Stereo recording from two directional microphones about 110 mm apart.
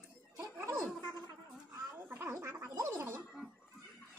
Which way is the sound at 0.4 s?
25° right (ahead or behind).